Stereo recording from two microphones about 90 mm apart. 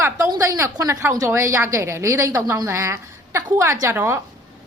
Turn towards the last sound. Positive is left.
turn(degrees=-30)  # may be behind; listen again after turning